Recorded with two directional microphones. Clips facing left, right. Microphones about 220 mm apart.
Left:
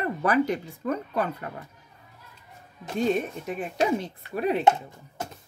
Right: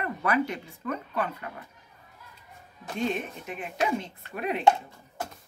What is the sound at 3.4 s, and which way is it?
Speech, 35° left (ahead or behind).